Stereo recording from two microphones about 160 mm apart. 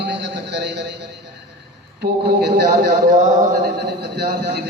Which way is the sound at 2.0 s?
70° right (ahead or behind).